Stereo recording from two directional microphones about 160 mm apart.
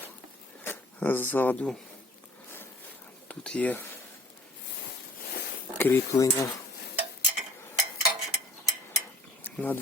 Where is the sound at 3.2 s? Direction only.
5° left (ahead or behind).